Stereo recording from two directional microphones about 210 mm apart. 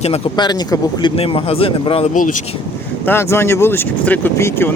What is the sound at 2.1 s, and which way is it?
Speech, 40° left (ahead or behind).